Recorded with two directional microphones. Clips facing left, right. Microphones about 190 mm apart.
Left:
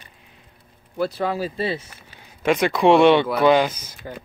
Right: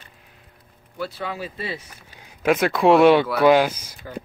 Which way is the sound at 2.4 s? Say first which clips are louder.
Even; centre (ahead or behind).